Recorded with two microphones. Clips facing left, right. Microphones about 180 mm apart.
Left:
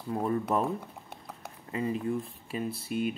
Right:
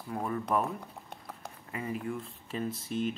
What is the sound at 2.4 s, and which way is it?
Speech, 10° left (ahead or behind).